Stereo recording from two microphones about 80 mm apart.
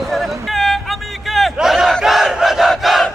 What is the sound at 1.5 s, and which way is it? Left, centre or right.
Battle cry, centre.